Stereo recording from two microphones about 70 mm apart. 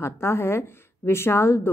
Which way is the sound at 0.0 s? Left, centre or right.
Left.